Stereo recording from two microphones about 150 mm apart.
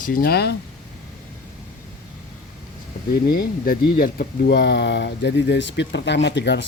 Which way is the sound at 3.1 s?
75° left (ahead or behind).